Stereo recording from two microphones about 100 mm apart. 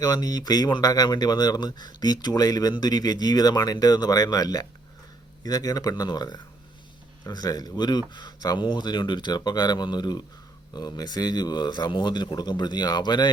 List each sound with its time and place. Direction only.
0.0 s speech: 40° left (ahead or behind)